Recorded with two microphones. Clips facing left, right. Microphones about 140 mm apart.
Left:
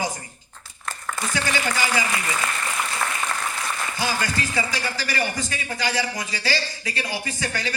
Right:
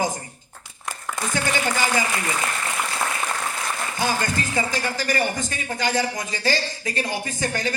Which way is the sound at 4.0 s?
50° right (ahead or behind).